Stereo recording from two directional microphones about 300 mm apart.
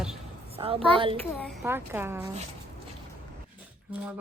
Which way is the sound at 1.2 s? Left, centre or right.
Centre.